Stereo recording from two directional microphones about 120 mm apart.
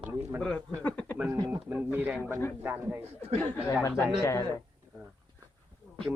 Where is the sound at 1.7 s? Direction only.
10° right (ahead or behind).